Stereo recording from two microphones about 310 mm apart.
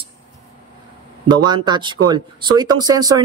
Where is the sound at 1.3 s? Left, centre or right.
Centre.